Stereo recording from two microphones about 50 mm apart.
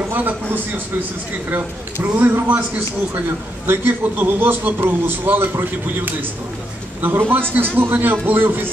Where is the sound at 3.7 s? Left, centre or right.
Right.